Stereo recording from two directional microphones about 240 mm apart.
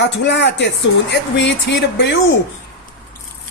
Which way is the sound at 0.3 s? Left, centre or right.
Left.